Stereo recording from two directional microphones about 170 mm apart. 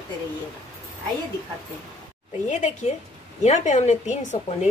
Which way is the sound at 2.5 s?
45° left (ahead or behind).